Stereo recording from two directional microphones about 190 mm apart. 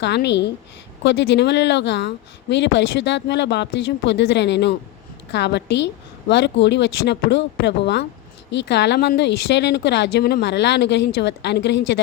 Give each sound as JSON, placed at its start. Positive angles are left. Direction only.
{"t": 0.0, "sound": "speech", "side_deg": 65}